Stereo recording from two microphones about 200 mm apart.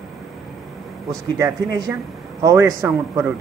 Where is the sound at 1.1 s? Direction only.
15° right (ahead or behind).